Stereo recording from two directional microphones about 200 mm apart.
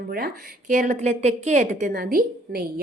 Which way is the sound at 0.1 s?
50° right (ahead or behind).